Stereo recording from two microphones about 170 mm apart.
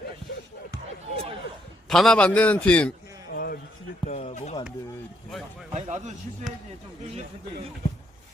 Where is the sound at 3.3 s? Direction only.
60° left (ahead or behind).